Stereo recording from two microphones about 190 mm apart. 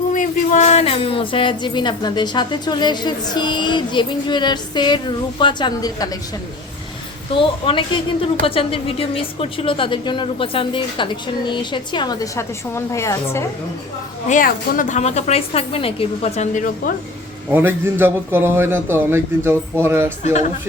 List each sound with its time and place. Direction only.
0.1 s music: 40° left (ahead or behind); by 6.1 s 20° left (ahead or behind)
7.3 s music: 25° left (ahead or behind)
14.3 s a woman's voice: 45° left (ahead or behind)
17.5 s a man's voice: 10° right (ahead or behind)